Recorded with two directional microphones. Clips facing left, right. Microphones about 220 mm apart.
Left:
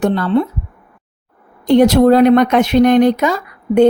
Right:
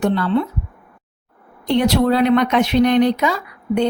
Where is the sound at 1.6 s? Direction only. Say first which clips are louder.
Left 7 dB; 45° left (ahead or behind).